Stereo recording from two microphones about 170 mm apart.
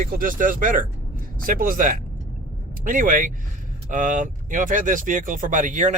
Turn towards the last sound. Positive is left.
turn(degrees=-45)  # may be behind; listen again after turning